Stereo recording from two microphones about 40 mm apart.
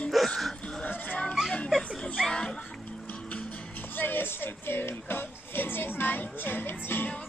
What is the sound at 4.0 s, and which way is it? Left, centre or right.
Music, left.